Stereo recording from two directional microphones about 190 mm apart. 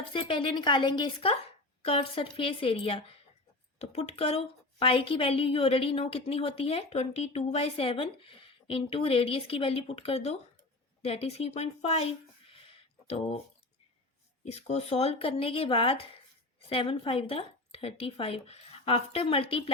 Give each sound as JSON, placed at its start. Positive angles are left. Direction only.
{"t": 0.0, "sound": "a woman's voice", "side_deg": 25}
{"t": 12.5, "sound": "a sound", "side_deg": 30}
{"t": 14.4, "sound": "a woman's voice", "side_deg": 35}